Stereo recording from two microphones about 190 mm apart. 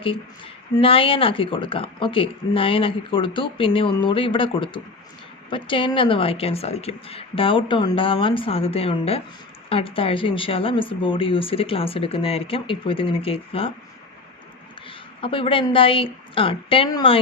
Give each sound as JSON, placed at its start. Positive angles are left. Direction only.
{"t": 0.0, "sound": "speech", "side_deg": 30}
{"t": 14.8, "sound": "a woman's voice", "side_deg": 30}